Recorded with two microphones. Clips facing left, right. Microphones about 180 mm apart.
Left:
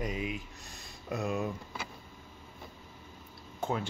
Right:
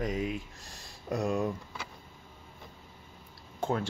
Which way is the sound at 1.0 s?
45° right (ahead or behind).